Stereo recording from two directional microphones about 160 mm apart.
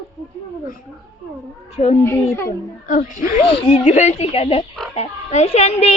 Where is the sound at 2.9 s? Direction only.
55° left (ahead or behind).